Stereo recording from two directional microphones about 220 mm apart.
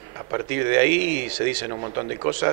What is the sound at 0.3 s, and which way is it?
Speech, 15° right (ahead or behind).